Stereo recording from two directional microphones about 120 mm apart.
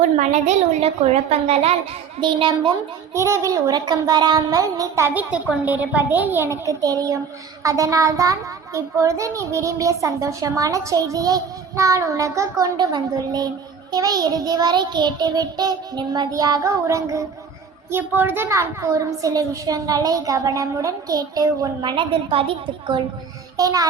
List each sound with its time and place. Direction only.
0.2 s a woman's voice: 70° right (ahead or behind)
2.2 s child singing: 40° right (ahead or behind)
3.2 s a child's voice: 25° right (ahead or behind)
5.3 s a child's voice: 10° right (ahead or behind); by 13.5 s 35° right (ahead or behind)
13.9 s child singing: 35° right (ahead or behind)
17.9 s a child's voice: 20° right (ahead or behind); by 22.0 s 35° right (ahead or behind)
22.3 s a woman's voice: 50° right (ahead or behind)
23.6 s child singing: 30° right (ahead or behind)